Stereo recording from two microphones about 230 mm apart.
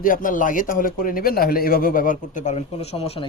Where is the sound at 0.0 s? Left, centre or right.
Left.